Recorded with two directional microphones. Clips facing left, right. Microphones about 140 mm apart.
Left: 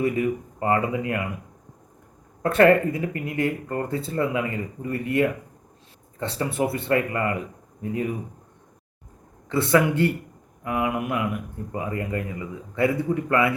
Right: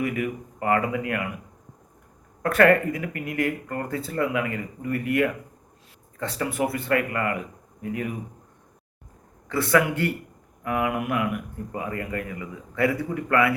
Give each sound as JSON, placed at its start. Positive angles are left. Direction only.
{"t": 0.0, "sound": "speech", "side_deg": 25}
{"t": 2.4, "sound": "speech", "side_deg": 25}
{"t": 9.5, "sound": "speech", "side_deg": 25}